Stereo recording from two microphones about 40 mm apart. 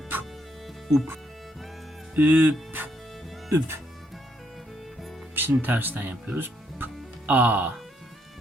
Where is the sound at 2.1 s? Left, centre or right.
Right.